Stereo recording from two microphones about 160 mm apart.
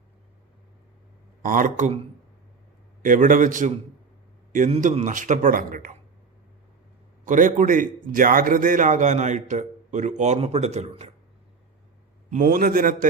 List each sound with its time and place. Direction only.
1.4 s a man's voice: 55° right (ahead or behind)
3.0 s a man's voice: 55° right (ahead or behind)
7.3 s a man's voice: 55° right (ahead or behind)
12.3 s a man's voice: 60° right (ahead or behind)